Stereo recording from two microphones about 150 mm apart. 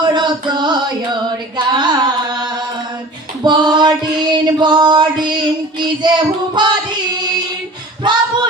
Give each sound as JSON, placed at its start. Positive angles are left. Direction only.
{"t": 0.0, "sound": "carnatic music", "side_deg": -30}
{"t": 3.4, "sound": "female singing", "side_deg": -30}
{"t": 8.0, "sound": "a sound", "side_deg": -30}